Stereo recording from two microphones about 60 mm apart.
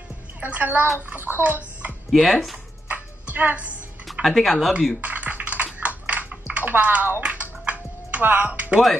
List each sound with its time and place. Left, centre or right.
0.4 s a woman's voice: right
2.0 s speech: centre
2.9 s music: right
4.1 s speech: centre
5.0 s typing: right
8.5 s a woman's voice: right